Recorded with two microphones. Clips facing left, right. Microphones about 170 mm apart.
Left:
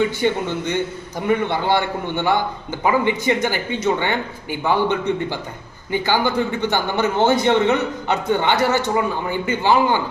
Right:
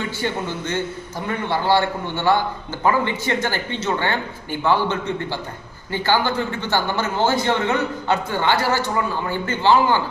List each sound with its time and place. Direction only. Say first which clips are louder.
0.0 s a man's voice: left 6 dB; 15° left (ahead or behind)